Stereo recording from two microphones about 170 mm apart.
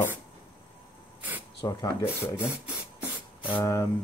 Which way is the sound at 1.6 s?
20° left (ahead or behind).